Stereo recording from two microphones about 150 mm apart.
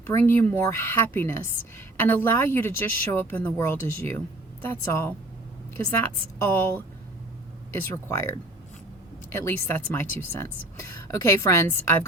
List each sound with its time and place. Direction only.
0.1 s a woman's voice: 15° left (ahead or behind)
6.4 s a woman's voice: 15° left (ahead or behind)